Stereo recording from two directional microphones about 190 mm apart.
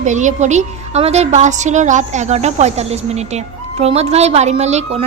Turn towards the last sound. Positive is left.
turn(degrees=-35)  # may be behind; listen again after turning